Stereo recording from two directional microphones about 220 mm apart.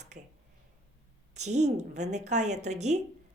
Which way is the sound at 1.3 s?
30° right (ahead or behind).